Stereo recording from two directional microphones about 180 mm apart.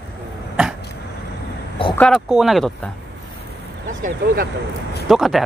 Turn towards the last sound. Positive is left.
turn(degrees=0)  # may be behind; listen again after turning